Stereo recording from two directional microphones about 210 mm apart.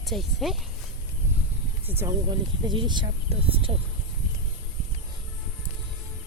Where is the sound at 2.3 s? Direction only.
20° right (ahead or behind).